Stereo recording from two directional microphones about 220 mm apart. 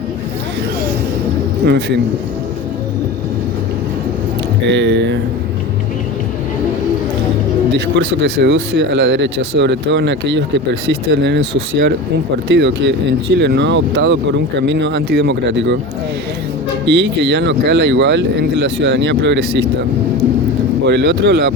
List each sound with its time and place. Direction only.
1.6 s speech: 50° right (ahead or behind)
4.7 s speech: 55° right (ahead or behind)
7.7 s speech: 55° right (ahead or behind)
16.8 s speech: 55° right (ahead or behind)
20.8 s speech: 55° right (ahead or behind)